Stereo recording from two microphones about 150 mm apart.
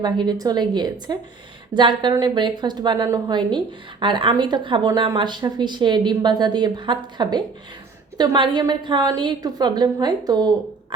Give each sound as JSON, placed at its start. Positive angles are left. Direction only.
{"t": 0.0, "sound": "a woman's voice", "side_deg": -30}